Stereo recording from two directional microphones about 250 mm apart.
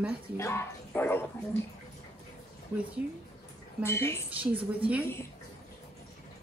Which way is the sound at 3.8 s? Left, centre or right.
Centre.